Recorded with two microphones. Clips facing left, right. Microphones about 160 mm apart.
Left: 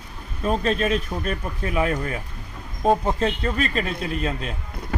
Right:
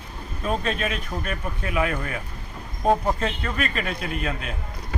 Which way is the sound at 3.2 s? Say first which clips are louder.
Left 4 dB; 30° left (ahead or behind).